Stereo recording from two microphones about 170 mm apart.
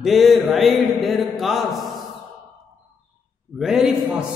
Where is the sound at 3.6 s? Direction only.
Centre (ahead or behind).